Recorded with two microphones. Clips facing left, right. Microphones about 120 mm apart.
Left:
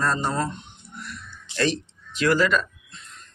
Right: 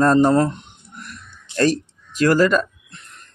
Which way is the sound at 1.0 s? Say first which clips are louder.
Even; 45° right (ahead or behind).